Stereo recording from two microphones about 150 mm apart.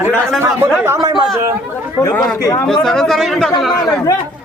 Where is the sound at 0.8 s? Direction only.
20° right (ahead or behind).